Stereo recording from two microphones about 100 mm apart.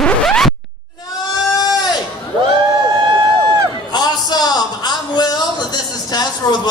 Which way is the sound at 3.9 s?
45° left (ahead or behind).